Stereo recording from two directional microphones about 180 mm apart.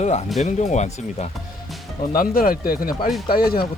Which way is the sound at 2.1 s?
55° left (ahead or behind).